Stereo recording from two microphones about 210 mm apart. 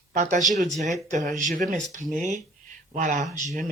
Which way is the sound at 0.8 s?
35° right (ahead or behind).